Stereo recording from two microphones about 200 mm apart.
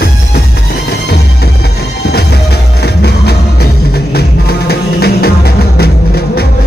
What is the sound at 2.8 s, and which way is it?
Music, 55° left (ahead or behind).